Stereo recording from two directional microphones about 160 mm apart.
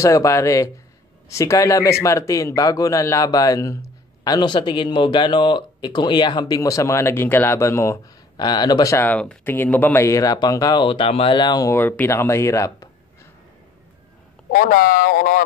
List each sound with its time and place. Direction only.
0.0 s a man's voice: 20° left (ahead or behind)
11.7 s speech: 15° left (ahead or behind)
14.5 s speech: 60° left (ahead or behind)